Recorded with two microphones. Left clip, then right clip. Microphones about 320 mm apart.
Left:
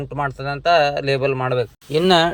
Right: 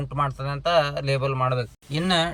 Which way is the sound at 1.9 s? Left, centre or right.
Centre.